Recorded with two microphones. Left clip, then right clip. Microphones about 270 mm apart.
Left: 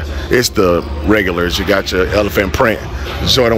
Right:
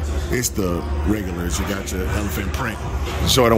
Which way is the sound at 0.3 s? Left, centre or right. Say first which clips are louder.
Left 12 dB; centre.